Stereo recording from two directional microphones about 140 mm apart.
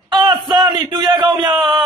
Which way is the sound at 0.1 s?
30° right (ahead or behind).